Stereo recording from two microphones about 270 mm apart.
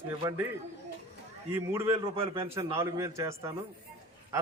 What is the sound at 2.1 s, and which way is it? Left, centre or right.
A man's voice, right.